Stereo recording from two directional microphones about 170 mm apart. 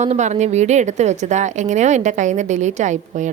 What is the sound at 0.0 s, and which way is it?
Speech, 45° right (ahead or behind).